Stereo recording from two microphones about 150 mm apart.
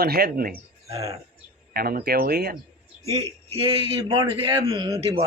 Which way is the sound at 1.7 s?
90° right.